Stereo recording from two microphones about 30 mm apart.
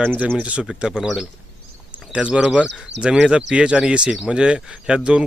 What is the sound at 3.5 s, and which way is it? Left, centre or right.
Speech, right.